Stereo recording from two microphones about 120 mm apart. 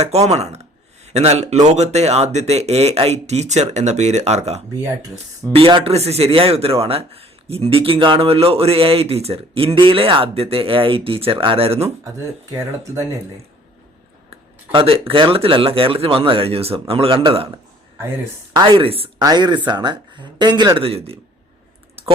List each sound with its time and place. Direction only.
0.0 s speech: 60° right (ahead or behind)
5.5 s speech: 50° right (ahead or behind)
14.3 s speech: 50° right (ahead or behind)
19.2 s speech: 35° right (ahead or behind)
20.8 s speech: 55° right (ahead or behind)
22.0 s typing: 55° right (ahead or behind)